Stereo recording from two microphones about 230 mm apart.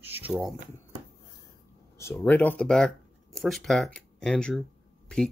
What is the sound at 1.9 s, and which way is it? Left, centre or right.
Speech, centre.